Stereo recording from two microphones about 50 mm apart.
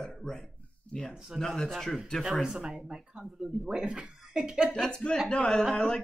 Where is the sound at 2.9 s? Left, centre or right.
Centre.